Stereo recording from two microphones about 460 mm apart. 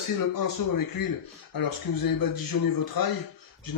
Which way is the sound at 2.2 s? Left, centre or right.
Left.